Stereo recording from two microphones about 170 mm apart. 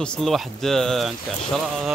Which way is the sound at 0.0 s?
5° left (ahead or behind).